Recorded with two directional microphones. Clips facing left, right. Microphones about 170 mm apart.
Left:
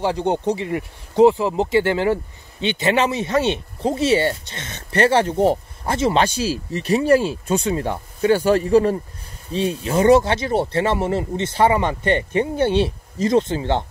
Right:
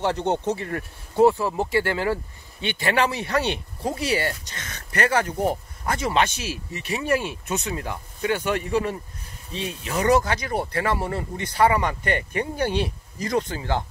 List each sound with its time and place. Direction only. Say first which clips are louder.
0.0 s speech: left 3 dB; 10° left (ahead or behind)